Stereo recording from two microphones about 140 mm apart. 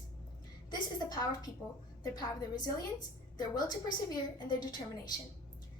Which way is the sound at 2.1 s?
30° left (ahead or behind).